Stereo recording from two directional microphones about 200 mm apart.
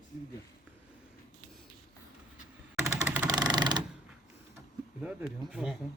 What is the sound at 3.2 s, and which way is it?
Sewing machine, 20° right (ahead or behind).